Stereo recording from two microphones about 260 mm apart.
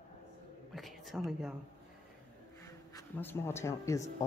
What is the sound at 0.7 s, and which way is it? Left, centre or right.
Whispering, centre.